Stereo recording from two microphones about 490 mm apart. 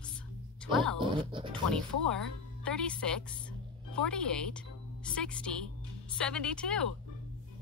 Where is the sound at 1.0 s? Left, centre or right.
Centre.